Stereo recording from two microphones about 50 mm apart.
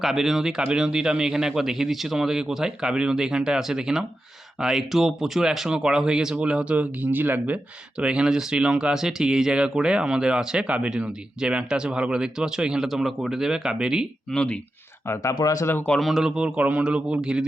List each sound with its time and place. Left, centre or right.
0.0 s speech: centre; by 6.7 s right
6.7 s speech: right
7.9 s speech: centre
12.9 s speech: centre
14.3 s speech: centre
15.0 s speech: left
16.0 s a man's voice: centre
16.3 s speech: right